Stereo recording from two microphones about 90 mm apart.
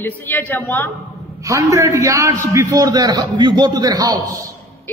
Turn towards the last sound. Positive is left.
turn(degrees=-45)  # may be behind; listen again after turning